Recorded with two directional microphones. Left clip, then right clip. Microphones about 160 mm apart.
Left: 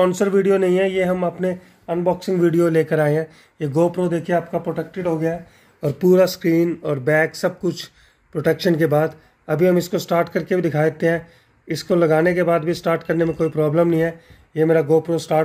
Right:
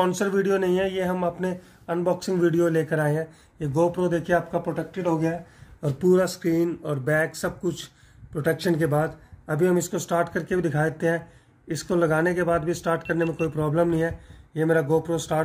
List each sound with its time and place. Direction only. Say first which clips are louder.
0.0 s speech: left 6 dB; 40° left (ahead or behind)
1.9 s speech: left 4 dB; 25° left (ahead or behind); by 4.6 s 45° left (ahead or behind)
4.7 s speech: left 3 dB; 20° left (ahead or behind)
5.8 s speech: left 6 dB; 30° left (ahead or behind)